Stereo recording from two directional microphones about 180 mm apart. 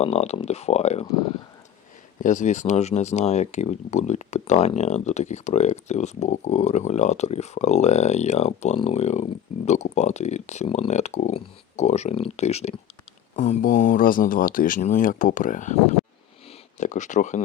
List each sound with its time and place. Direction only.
0.0 s speech: 35° left (ahead or behind)
2.2 s speech: 45° left (ahead or behind)